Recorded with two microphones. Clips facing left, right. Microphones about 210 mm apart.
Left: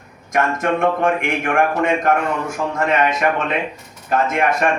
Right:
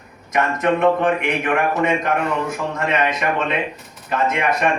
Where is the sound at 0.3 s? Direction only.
50° left (ahead or behind).